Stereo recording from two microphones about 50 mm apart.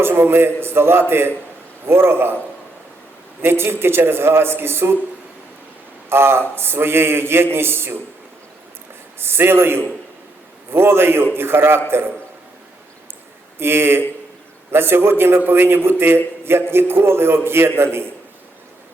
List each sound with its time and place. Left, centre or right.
0.0 s a man's voice: right
3.4 s speech: right
6.1 s a man's voice: right
9.1 s speech: right
13.6 s speech: right